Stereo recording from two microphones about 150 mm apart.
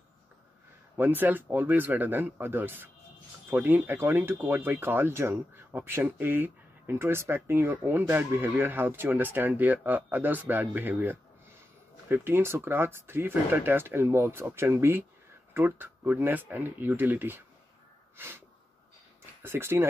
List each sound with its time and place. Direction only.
0.9 s speech: 15° right (ahead or behind)
18.1 s wheeze: 15° right (ahead or behind)
19.4 s speech: 15° right (ahead or behind)